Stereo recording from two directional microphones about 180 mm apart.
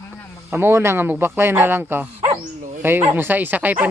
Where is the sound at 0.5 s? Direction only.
15° right (ahead or behind).